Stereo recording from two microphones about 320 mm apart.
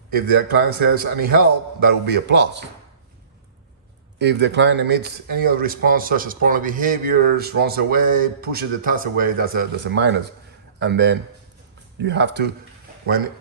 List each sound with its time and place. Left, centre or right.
0.1 s speech: right
4.2 s a man's voice: right